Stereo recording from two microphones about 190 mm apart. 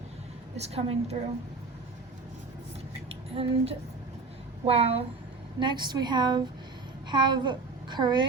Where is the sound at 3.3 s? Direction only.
30° right (ahead or behind).